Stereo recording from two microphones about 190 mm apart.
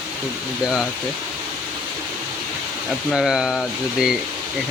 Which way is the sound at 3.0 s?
5° right (ahead or behind).